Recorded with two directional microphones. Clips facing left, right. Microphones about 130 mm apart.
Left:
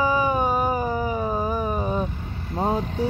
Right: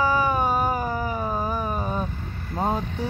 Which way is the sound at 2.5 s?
10° left (ahead or behind).